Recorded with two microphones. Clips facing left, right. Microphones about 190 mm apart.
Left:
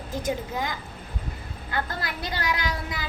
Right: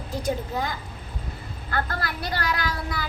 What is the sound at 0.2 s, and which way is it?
Speech, 15° left (ahead or behind).